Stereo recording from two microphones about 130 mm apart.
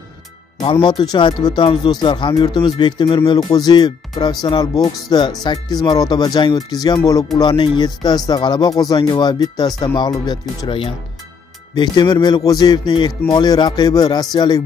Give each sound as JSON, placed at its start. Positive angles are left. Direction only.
{"t": 0.6, "sound": "speech", "side_deg": 40}
{"t": 11.7, "sound": "speech", "side_deg": 35}